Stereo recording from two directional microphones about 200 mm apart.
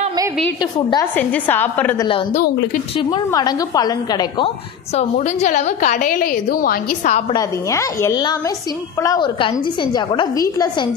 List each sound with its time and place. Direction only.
0.6 s a woman's voice: 20° left (ahead or behind)
1.1 s a woman's voice: 10° left (ahead or behind)
2.3 s speech: 50° left (ahead or behind)
3.0 s a woman's voice: 20° left (ahead or behind)
4.9 s a woman's voice: 35° left (ahead or behind)
7.3 s a woman's voice: 15° left (ahead or behind)